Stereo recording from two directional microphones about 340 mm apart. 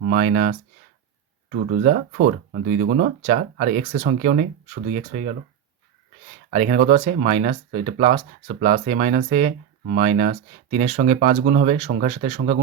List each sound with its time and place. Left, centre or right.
0.0 s speech: right
6.5 s speech: centre